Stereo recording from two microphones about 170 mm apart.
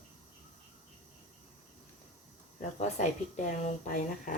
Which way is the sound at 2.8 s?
45° left (ahead or behind).